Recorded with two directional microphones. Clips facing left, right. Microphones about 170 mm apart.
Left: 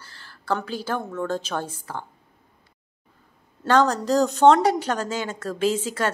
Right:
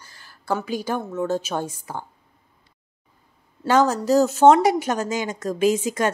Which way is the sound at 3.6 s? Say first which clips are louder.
Right 1 dB; 5° right (ahead or behind).